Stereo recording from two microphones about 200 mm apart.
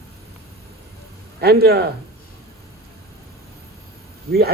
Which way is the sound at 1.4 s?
50° right (ahead or behind).